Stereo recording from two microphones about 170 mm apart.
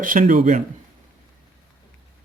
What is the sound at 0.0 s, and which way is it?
Speech, 50° right (ahead or behind).